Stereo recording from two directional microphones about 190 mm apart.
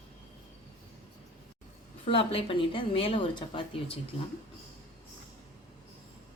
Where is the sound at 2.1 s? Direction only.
30° left (ahead or behind).